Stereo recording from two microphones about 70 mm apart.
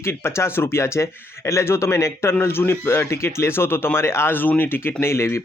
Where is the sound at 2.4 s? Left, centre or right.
Left.